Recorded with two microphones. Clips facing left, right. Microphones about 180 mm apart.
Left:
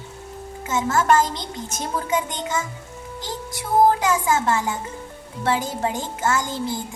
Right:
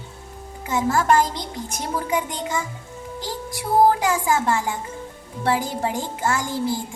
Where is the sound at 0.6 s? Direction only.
20° left (ahead or behind).